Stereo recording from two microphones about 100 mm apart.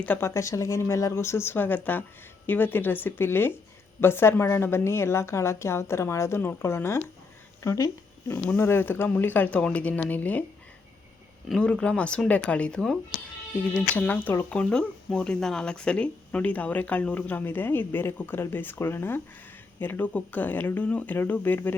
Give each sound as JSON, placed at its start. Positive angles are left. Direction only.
{"t": 0.0, "sound": "speech", "side_deg": 15}
{"t": 0.3, "sound": "a woman's voice", "side_deg": 30}
{"t": 11.4, "sound": "speech", "side_deg": 5}